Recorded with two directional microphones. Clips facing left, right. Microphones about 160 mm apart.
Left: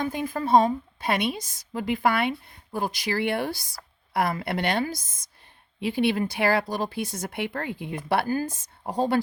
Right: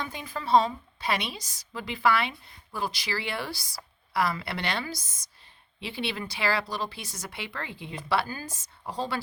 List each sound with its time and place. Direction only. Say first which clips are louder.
0.0 s speech: left 8 dB; 50° left (ahead or behind)